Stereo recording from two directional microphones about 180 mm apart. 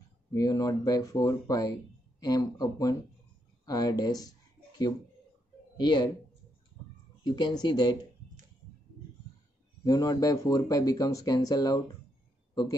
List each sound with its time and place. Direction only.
0.3 s speech: 20° left (ahead or behind)
5.8 s a woman's voice: 25° left (ahead or behind)
7.2 s speech: 25° left (ahead or behind)
9.8 s speech: 20° left (ahead or behind)